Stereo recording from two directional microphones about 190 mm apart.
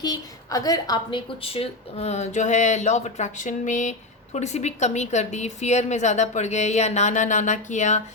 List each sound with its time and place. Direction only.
0.0 s a woman's voice: 20° left (ahead or behind); by 8.0 s 40° left (ahead or behind)